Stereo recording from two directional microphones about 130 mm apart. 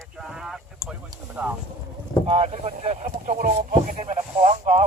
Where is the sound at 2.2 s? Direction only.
45° right (ahead or behind).